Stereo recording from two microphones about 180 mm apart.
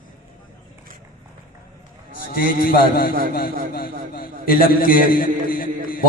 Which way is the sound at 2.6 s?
55° left (ahead or behind).